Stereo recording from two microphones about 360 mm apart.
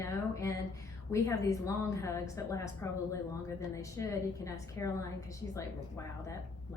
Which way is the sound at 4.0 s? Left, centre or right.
Centre.